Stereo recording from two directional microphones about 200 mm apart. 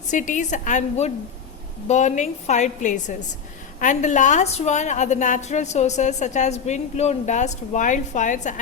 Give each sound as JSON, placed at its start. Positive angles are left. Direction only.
{"t": 0.1, "sound": "a woman's voice", "side_deg": 40}